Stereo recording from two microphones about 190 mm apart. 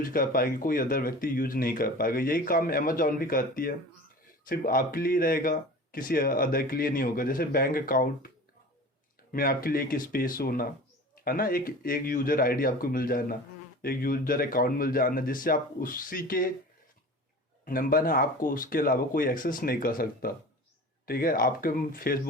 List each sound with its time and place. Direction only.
0.0 s speech: 50° left (ahead or behind)
9.3 s speech: 50° left (ahead or behind)
17.7 s speech: 50° left (ahead or behind)